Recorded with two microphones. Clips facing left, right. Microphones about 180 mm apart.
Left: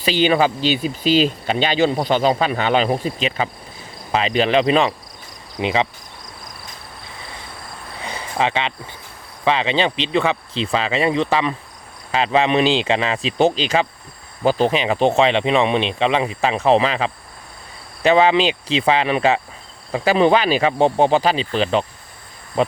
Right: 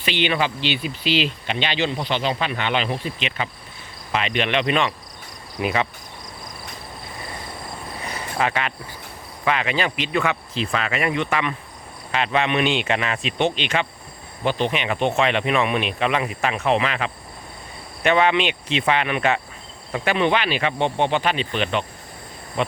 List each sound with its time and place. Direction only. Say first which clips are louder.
0.0 s speech: left 6 dB; 40° left (ahead or behind)
8.0 s a sound: left 3 dB; 25° left (ahead or behind)
9.4 s speech: left 4 dB; 25° left (ahead or behind)